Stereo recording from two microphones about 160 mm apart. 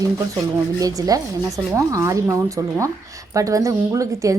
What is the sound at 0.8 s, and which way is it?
A woman's voice, 20° right (ahead or behind).